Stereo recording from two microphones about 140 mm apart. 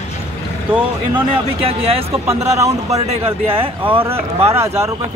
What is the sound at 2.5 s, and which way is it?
Speech, 25° right (ahead or behind).